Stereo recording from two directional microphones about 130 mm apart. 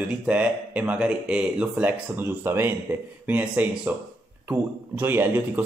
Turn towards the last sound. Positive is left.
turn(degrees=-15)  # may be behind; listen again after turning